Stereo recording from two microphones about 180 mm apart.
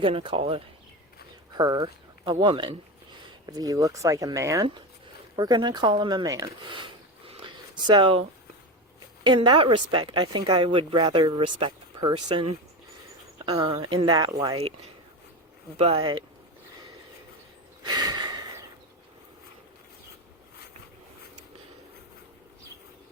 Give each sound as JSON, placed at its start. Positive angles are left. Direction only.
{"t": 0.0, "sound": "a woman's voice", "side_deg": -30}
{"t": 9.2, "sound": "a woman's voice", "side_deg": -25}
{"t": 15.8, "sound": "speech", "side_deg": -30}
{"t": 17.8, "sound": "gasp", "side_deg": -25}